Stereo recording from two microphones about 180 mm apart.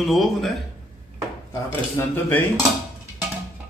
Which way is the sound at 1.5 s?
10° left (ahead or behind).